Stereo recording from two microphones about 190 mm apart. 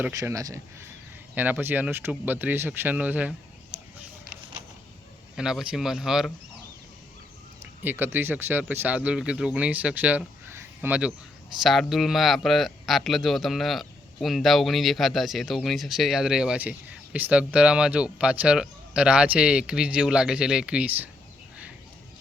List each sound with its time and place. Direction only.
0.0 s speech: 15° right (ahead or behind)
5.4 s speech: 5° right (ahead or behind)
7.6 s speech: 10° right (ahead or behind)